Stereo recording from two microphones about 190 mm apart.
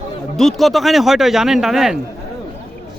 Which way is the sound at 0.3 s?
Centre (ahead or behind).